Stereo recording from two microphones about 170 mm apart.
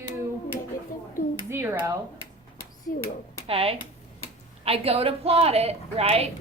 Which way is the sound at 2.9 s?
55° left (ahead or behind).